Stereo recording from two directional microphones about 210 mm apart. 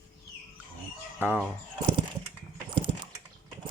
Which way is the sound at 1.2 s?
10° right (ahead or behind).